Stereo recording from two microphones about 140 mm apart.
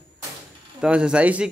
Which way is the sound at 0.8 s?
5° right (ahead or behind).